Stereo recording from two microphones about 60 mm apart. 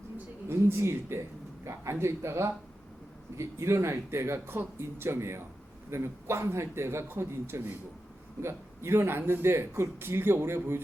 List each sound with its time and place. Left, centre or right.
0.4 s speech: right